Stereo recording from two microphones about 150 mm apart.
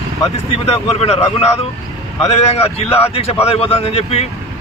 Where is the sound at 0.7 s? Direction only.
45° left (ahead or behind).